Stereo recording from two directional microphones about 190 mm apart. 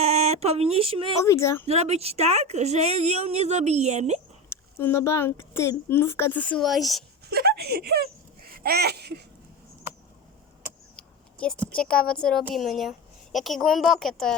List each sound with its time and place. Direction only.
0.0 s speech: 35° right (ahead or behind)
1.2 s speech: 15° left (ahead or behind)
1.6 s a woman's voice: 35° right (ahead or behind)
4.4 s speech: 10° left (ahead or behind)
7.3 s speech: 55° right (ahead or behind)
8.4 s babbling: 55° right (ahead or behind)
10.9 s a sound: 5° left (ahead or behind)
11.8 s a woman's voice: 5° left (ahead or behind)